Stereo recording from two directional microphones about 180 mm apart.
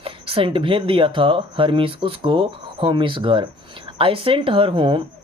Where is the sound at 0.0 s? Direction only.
30° right (ahead or behind).